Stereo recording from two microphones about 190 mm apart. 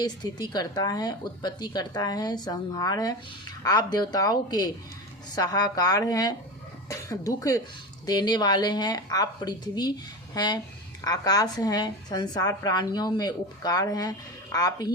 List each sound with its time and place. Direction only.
0.0 s a woman's voice: 20° left (ahead or behind)